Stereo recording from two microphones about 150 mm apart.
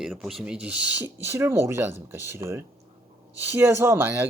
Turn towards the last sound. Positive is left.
turn(degrees=-15)  # may be behind; listen again after turning